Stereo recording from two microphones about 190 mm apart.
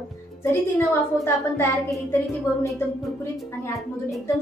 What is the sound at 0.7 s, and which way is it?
A woman's voice, 10° left (ahead or behind).